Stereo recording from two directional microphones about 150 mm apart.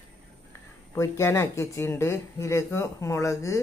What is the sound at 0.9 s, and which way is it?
Speech, 20° left (ahead or behind).